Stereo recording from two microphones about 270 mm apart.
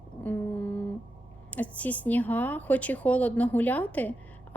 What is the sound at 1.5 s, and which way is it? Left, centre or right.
A woman's voice, centre.